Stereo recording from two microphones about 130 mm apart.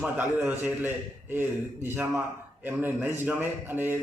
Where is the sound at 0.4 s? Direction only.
15° right (ahead or behind).